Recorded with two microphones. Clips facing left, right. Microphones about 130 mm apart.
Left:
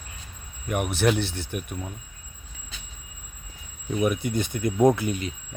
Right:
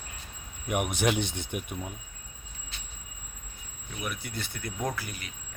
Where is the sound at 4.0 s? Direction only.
20° left (ahead or behind).